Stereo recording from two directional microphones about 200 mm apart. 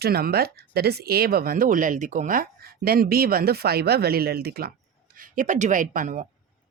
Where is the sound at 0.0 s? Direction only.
50° right (ahead or behind).